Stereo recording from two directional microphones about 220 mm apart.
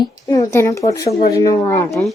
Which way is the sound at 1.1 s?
40° left (ahead or behind).